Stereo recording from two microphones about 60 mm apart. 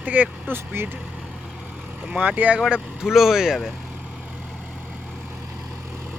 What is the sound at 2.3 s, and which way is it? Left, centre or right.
Speech, right.